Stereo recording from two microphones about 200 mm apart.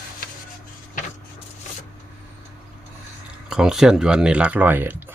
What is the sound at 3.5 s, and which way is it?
Speech, 5° right (ahead or behind).